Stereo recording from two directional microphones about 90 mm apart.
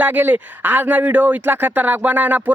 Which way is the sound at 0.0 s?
20° right (ahead or behind).